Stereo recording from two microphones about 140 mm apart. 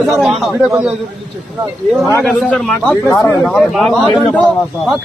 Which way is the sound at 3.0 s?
15° left (ahead or behind).